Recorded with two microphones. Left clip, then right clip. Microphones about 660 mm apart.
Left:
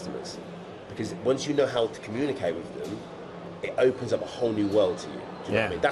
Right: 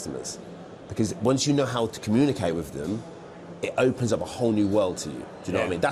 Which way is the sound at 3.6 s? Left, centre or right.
Right.